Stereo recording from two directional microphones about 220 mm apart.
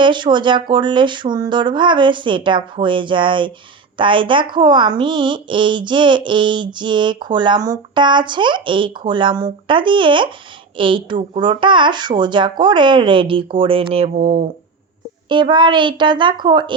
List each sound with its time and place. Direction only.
0.0 s speech: 20° right (ahead or behind)
15.3 s speech: 20° right (ahead or behind)